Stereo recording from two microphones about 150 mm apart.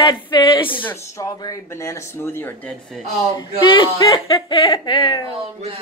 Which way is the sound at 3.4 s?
30° left (ahead or behind).